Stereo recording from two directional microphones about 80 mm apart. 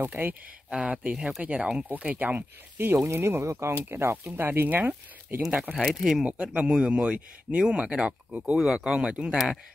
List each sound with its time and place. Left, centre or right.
0.0 s speech: right
0.7 s speech: centre
5.7 s speech: centre
5.9 s speech: centre
6.2 s speech: centre